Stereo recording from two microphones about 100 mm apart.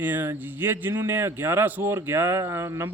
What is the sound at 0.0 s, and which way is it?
Speech, 20° right (ahead or behind).